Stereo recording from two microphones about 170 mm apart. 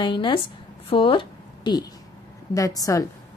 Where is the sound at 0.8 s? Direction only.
30° left (ahead or behind).